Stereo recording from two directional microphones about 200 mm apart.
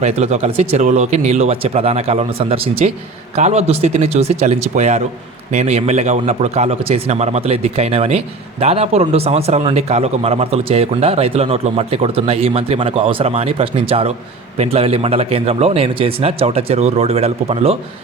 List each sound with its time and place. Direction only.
0.0 s a man's voice: 30° right (ahead or behind)